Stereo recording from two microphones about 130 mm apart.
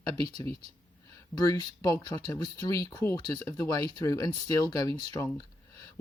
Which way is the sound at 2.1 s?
30° left (ahead or behind).